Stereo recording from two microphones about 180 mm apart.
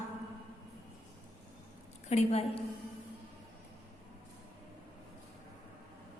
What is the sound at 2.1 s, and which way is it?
Speech, 40° left (ahead or behind).